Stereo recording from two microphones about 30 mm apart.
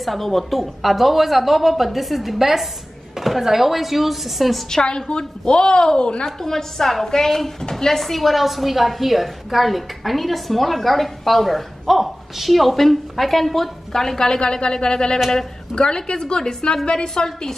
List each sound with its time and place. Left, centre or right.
0.0 s a woman's voice: centre
4.8 s a woman's voice: left
6.2 s a woman's voice: centre
14.5 s a woman's voice: left
17.2 s a woman's voice: centre